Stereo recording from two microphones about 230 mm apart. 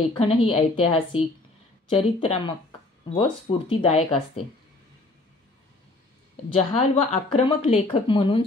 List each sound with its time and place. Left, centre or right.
0.2 s speech: left
6.7 s speech: left